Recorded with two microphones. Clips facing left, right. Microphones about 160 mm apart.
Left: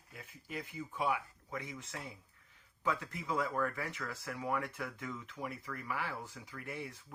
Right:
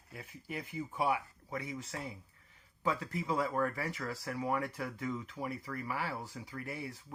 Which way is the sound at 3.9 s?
40° right (ahead or behind).